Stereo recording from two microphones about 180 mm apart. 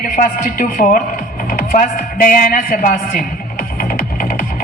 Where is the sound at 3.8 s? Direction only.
50° left (ahead or behind).